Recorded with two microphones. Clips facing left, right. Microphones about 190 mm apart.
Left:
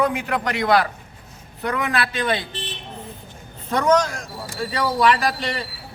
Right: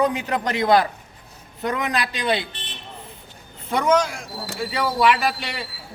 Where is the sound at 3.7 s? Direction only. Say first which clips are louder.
Left 1 dB; 10° right (ahead or behind).